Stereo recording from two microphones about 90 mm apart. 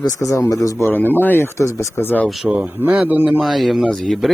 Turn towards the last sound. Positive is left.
turn(degrees=0)  # may be behind; listen again after turning